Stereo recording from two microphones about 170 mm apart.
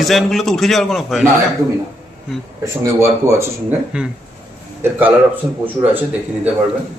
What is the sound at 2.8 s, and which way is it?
Speech, 15° right (ahead or behind).